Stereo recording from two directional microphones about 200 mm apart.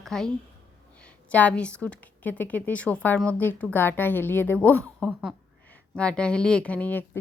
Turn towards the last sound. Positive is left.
turn(degrees=10)  # may be behind; listen again after turning